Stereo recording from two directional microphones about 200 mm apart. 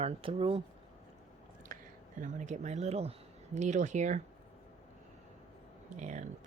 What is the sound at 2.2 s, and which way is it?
Speech, 35° right (ahead or behind).